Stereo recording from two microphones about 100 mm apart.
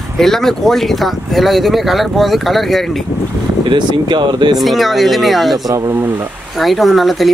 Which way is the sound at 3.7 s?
50° right (ahead or behind).